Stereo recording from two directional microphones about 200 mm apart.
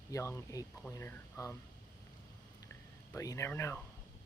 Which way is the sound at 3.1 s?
15° left (ahead or behind).